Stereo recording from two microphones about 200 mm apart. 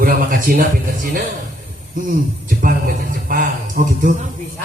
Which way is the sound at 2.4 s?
45° right (ahead or behind).